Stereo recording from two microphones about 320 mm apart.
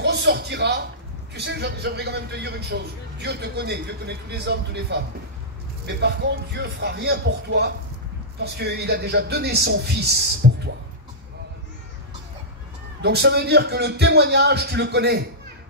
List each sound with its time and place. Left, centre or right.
0.0 s a man's voice: right
10.4 s a sound: right
13.0 s a man's voice: right